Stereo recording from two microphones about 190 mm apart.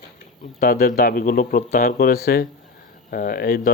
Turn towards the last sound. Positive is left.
turn(degrees=50)  # may be behind; listen again after turning